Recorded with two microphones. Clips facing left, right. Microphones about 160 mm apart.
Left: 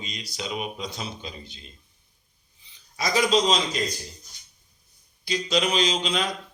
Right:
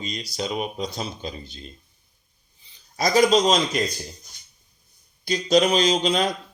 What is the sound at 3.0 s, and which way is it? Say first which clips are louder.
Speech: right 4 dB; 45° right (ahead or behind).